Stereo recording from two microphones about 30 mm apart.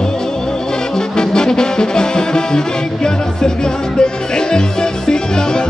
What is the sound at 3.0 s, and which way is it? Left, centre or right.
Music, left.